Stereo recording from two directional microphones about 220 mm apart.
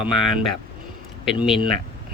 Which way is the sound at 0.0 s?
Centre (ahead or behind).